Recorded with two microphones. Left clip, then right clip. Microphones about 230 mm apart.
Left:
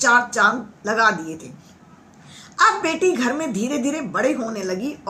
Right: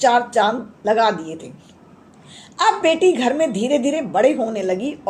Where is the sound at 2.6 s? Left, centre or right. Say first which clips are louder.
Right 2 dB; left.